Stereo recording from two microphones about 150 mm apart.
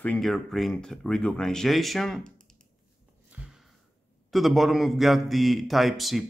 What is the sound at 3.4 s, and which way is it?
Sniff, 10° right (ahead or behind).